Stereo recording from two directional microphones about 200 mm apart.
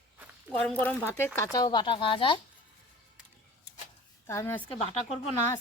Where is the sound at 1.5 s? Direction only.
20° left (ahead or behind).